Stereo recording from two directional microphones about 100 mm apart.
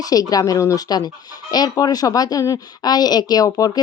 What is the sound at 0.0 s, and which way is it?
Speech, 40° left (ahead or behind).